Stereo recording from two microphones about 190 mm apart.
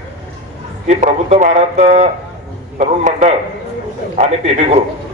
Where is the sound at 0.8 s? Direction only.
35° right (ahead or behind).